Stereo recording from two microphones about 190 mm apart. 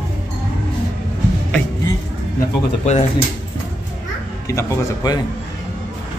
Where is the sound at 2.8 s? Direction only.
35° left (ahead or behind).